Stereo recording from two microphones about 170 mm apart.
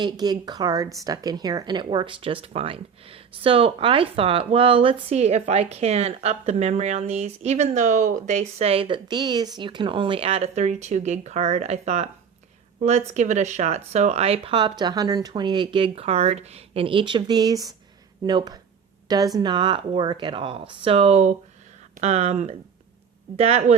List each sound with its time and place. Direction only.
0.0 s a woman's voice: 25° right (ahead or behind); by 23.7 s 40° right (ahead or behind)